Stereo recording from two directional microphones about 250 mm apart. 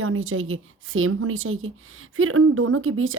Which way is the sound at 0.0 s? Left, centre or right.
Right.